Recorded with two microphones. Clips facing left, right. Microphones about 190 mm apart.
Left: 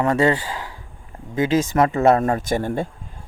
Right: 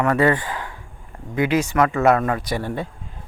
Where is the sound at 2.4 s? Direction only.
45° left (ahead or behind).